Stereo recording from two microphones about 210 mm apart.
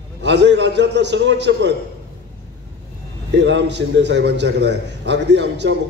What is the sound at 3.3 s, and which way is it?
A man's voice, 55° right (ahead or behind).